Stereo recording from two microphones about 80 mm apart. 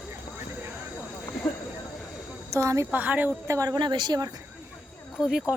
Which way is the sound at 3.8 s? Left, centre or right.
Right.